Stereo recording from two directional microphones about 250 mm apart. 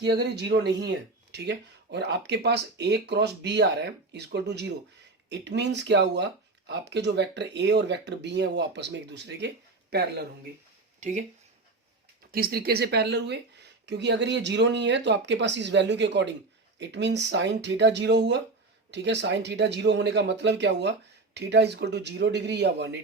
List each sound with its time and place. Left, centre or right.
0.0 s speech: right
11.0 s speech: right
12.3 s speech: right